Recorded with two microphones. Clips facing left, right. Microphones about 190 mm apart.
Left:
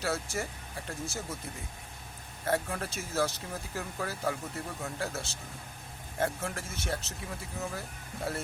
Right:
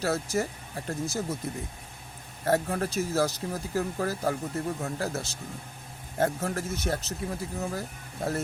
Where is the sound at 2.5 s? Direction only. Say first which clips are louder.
Right 5 dB; 40° right (ahead or behind).